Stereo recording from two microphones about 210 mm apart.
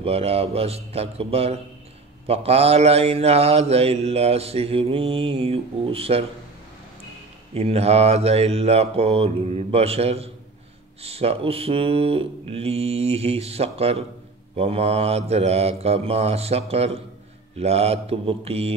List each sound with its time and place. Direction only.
0.0 s mantra: 30° right (ahead or behind)
7.5 s mantra: 30° right (ahead or behind)